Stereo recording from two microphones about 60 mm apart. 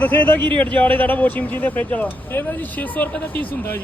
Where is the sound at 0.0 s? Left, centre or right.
Left.